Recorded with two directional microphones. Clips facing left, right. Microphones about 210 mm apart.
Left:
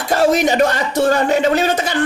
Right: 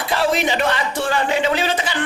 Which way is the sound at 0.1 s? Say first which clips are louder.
Left 6 dB; 45° left (ahead or behind).